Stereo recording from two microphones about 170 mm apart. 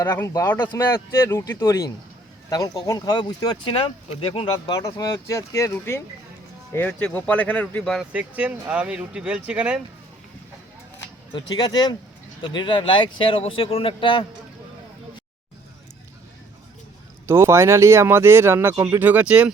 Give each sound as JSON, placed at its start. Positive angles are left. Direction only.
{"t": 0.0, "sound": "speech", "side_deg": 15}
{"t": 11.3, "sound": "speech", "side_deg": 25}
{"t": 17.2, "sound": "speech", "side_deg": -15}